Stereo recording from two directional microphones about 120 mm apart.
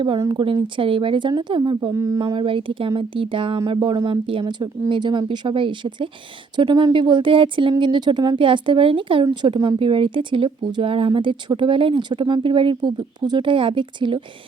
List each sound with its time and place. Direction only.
0.3 s speech: 45° right (ahead or behind)
1.9 s speech: 25° right (ahead or behind)
2.2 s speech: 45° right (ahead or behind)